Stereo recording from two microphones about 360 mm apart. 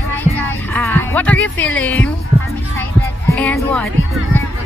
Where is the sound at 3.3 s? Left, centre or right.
Centre.